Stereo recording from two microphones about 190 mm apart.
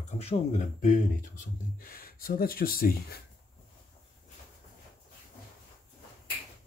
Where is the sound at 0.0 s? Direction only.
35° left (ahead or behind).